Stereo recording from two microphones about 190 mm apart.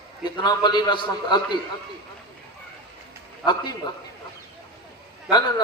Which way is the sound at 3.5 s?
20° left (ahead or behind).